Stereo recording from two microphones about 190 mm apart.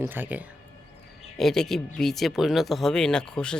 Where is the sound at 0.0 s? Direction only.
10° right (ahead or behind).